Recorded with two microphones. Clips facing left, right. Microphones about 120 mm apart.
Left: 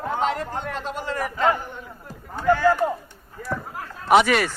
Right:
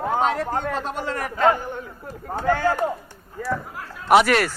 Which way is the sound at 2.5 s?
50° right (ahead or behind).